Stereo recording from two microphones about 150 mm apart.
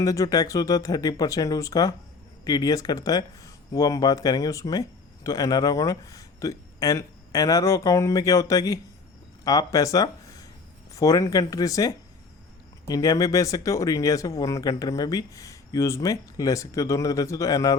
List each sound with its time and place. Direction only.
0.0 s speech: 20° left (ahead or behind)